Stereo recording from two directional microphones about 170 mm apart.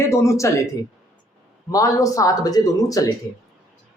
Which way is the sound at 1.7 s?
20° left (ahead or behind).